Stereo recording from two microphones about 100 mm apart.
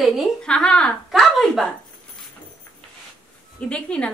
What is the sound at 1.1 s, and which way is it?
Speech, centre (ahead or behind).